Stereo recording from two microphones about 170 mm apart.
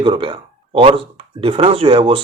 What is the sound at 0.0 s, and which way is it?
Speech, 30° right (ahead or behind).